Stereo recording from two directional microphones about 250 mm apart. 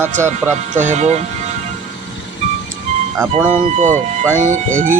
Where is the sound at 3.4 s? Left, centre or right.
Centre.